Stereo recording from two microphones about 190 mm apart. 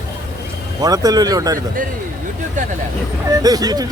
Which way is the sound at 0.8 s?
20° right (ahead or behind).